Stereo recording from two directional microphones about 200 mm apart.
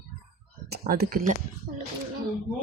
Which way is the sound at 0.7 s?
50° right (ahead or behind).